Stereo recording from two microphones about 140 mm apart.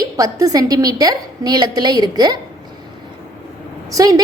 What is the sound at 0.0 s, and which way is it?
A woman's voice, 25° right (ahead or behind).